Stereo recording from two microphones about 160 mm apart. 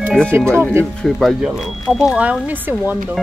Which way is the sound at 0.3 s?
15° right (ahead or behind).